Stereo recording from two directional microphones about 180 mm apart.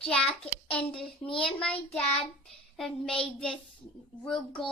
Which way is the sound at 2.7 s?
Centre (ahead or behind).